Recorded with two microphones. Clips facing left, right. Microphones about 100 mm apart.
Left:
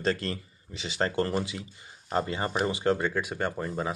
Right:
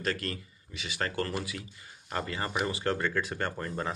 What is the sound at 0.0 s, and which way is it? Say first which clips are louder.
Speech: left 4 dB; 30° left (ahead or behind).